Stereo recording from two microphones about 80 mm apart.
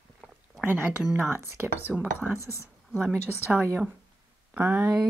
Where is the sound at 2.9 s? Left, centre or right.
Centre.